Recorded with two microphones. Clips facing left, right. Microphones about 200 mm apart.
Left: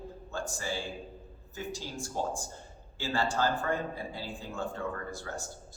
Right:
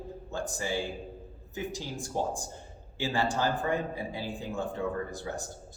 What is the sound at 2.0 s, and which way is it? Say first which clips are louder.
Speech: right 2 dB; 15° right (ahead or behind).